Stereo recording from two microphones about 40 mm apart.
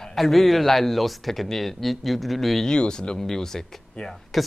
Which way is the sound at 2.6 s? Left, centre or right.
Left.